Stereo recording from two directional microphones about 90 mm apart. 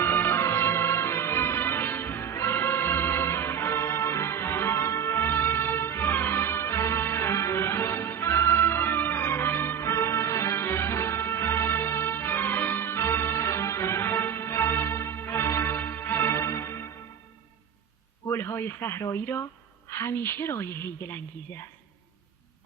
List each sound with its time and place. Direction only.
0.0 s music: 25° left (ahead or behind)
18.3 s radio: 30° left (ahead or behind)
19.1 s a woman's voice: 25° left (ahead or behind)